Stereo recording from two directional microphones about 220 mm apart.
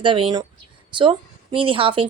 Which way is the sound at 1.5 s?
25° right (ahead or behind).